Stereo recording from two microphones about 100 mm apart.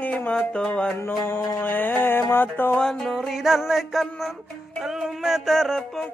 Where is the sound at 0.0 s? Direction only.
15° left (ahead or behind).